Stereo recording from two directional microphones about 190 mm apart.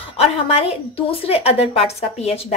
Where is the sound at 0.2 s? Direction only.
30° left (ahead or behind).